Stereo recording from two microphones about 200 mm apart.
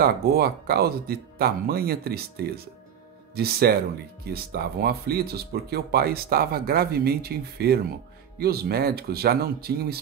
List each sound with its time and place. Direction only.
0.0 s speech: 50° right (ahead or behind)